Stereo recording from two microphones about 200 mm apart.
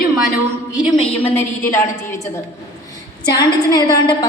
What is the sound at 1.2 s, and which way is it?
A woman's voice, 10° left (ahead or behind).